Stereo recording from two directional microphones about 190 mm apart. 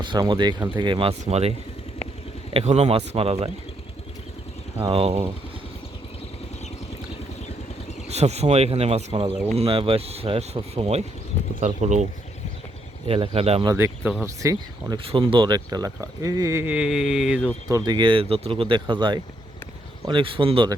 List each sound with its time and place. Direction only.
0.0 s speech: 25° right (ahead or behind)
4.9 s speech: 30° right (ahead or behind)
8.0 s speech: 35° right (ahead or behind)
13.1 s speech: 30° right (ahead or behind)
13.7 s speech: 10° right (ahead or behind)
17.7 s speech: 20° right (ahead or behind)